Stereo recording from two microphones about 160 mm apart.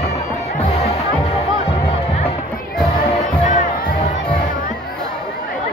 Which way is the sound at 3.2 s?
50° left (ahead or behind).